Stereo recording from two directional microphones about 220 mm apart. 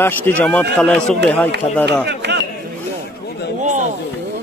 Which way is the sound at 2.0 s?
50° right (ahead or behind).